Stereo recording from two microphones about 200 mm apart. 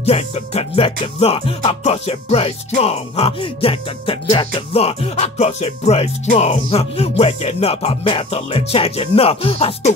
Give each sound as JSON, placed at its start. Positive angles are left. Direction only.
{"t": 0.0, "sound": "music", "side_deg": 30}